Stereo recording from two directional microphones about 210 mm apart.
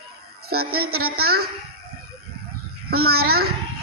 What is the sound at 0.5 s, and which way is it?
Music, 45° right (ahead or behind).